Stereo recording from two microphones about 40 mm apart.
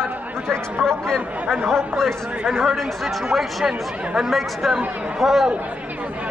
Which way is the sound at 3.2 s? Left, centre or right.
Centre.